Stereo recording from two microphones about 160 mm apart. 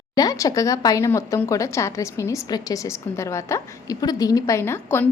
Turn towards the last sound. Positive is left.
turn(degrees=15)  # may be behind; listen again after turning